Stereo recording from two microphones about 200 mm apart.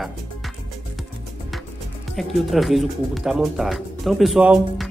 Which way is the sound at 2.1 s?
Centre (ahead or behind).